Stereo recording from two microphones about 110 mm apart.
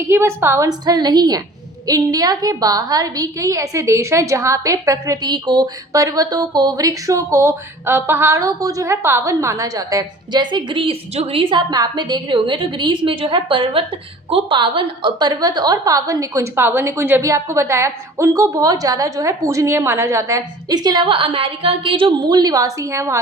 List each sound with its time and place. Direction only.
0.0 s a woman's voice: 25° right (ahead or behind)
0.7 s a woman's voice: 40° right (ahead or behind)
11.1 s a woman's voice: 65° right (ahead or behind); by 23.2 s 25° right (ahead or behind)